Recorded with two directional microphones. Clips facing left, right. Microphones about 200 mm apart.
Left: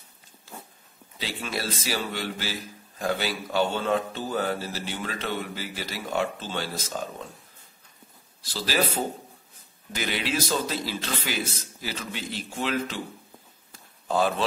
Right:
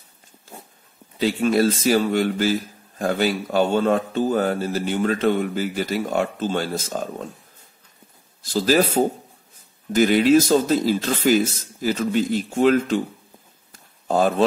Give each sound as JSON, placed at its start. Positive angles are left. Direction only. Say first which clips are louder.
{"t": 1.2, "sound": "speech", "louder": "right 14 dB", "side_deg": -45}
{"t": 8.4, "sound": "speech", "louder": "right 9 dB", "side_deg": -45}
{"t": 13.7, "sound": "a sound", "louder": "right 5 dB", "side_deg": -45}